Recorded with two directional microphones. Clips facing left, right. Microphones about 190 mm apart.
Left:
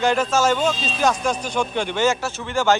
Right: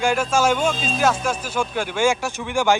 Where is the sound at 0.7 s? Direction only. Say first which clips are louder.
Right 3 dB; 50° right (ahead or behind).